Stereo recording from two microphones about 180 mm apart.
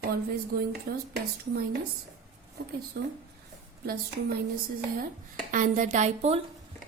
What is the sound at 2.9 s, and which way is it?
Speech, 55° right (ahead or behind).